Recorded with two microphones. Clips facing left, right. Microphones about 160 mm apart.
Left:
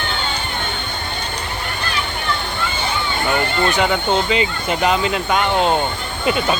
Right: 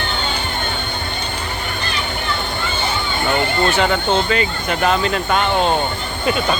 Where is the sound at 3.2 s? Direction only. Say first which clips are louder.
Right 1 dB; 10° left (ahead or behind).